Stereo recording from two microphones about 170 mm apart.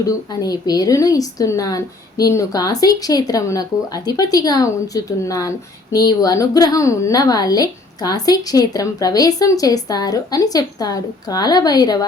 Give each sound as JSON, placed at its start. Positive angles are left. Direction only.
{"t": 0.0, "sound": "a woman's voice", "side_deg": 20}